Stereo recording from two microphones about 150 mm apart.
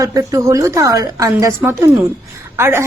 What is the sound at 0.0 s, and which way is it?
A woman's voice, 25° right (ahead or behind).